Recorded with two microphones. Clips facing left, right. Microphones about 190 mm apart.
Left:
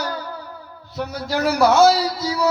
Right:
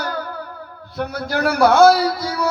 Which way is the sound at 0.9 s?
55° right (ahead or behind).